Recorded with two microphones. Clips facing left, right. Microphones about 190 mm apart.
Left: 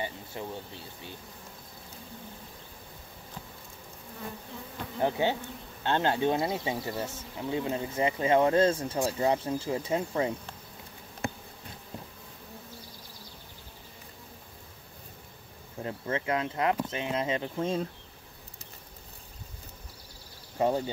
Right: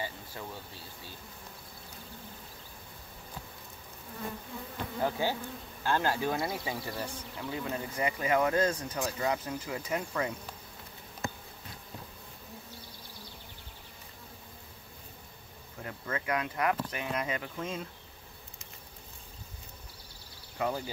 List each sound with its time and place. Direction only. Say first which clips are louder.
0.0 s a sound: left 3 dB; 20° left (ahead or behind)
5.0 s speech: left 4 dB; 20° left (ahead or behind)
15.8 s speech: left 5 dB; 25° left (ahead or behind)
20.5 s speech: left 6 dB; 30° left (ahead or behind)